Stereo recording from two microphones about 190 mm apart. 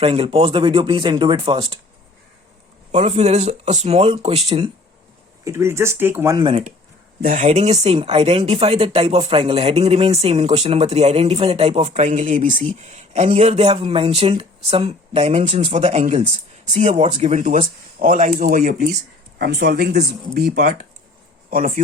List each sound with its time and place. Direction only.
0.0 s speech: 30° right (ahead or behind)
2.9 s speech: 35° right (ahead or behind)
5.5 s speech: 15° right (ahead or behind)
6.4 s speech: 30° right (ahead or behind); by 18.8 s 45° right (ahead or behind)
19.4 s speech: 60° right (ahead or behind)